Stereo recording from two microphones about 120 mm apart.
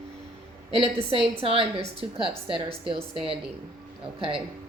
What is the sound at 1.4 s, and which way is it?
A woman's voice, 50° right (ahead or behind).